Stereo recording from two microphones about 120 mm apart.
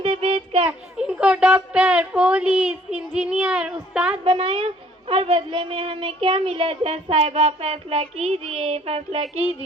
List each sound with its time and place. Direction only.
0.0 s child singing: 50° right (ahead or behind)
0.9 s speech: 10° right (ahead or behind)
4.2 s a woman's voice: 50° right (ahead or behind)